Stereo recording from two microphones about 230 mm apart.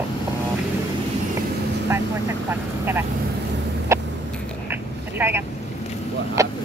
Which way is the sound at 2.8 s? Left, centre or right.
Centre.